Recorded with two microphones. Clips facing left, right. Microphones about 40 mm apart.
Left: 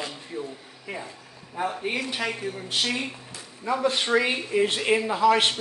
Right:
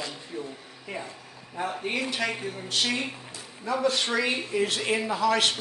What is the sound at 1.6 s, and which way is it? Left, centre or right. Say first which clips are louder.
Speech: left 2 dB; centre.